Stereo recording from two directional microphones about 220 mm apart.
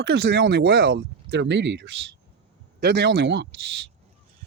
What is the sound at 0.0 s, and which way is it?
Speech, 50° right (ahead or behind).